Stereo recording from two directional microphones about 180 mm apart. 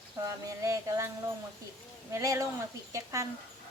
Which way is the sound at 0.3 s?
20° right (ahead or behind).